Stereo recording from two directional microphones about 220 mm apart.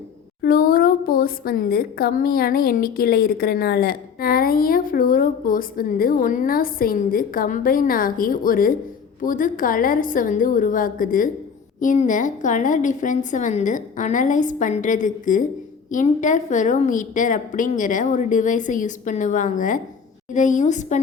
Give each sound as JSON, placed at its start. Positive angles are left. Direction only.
{"t": 0.4, "sound": "speech", "side_deg": 40}